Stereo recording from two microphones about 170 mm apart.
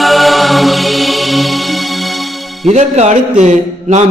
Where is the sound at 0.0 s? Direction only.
Centre (ahead or behind).